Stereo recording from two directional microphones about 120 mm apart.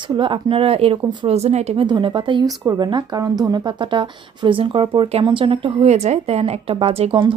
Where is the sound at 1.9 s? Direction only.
40° right (ahead or behind).